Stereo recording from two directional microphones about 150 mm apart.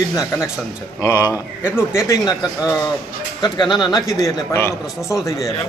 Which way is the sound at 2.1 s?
20° left (ahead or behind).